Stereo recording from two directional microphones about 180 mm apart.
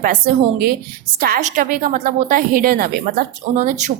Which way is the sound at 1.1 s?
55° right (ahead or behind).